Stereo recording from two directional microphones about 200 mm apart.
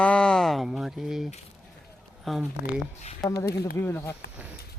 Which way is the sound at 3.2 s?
20° left (ahead or behind).